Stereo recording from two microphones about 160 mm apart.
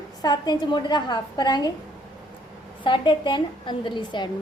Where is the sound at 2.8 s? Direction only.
30° left (ahead or behind).